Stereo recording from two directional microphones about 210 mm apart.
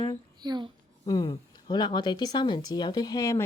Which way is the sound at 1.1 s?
20° left (ahead or behind).